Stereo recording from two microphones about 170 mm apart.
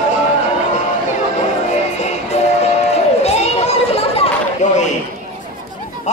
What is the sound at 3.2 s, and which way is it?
Children playing, 40° left (ahead or behind).